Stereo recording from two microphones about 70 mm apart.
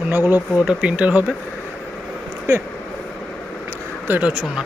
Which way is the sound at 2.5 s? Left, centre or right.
Right.